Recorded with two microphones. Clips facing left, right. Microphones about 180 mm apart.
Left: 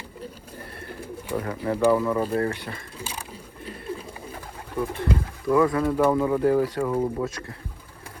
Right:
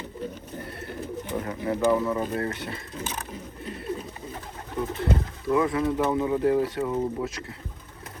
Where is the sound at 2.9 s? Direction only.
10° left (ahead or behind).